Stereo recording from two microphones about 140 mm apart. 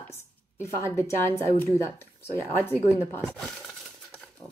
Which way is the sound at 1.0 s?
20° left (ahead or behind).